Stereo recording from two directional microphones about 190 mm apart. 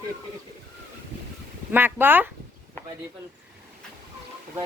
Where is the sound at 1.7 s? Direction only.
10° right (ahead or behind).